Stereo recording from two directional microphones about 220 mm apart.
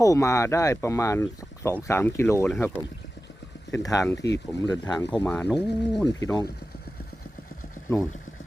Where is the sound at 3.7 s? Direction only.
15° left (ahead or behind).